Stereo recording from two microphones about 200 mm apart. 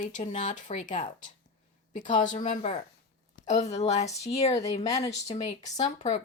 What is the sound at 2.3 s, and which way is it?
Speech, 35° left (ahead or behind).